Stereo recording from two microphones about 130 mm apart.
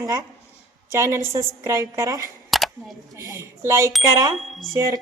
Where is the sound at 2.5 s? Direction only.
Centre (ahead or behind).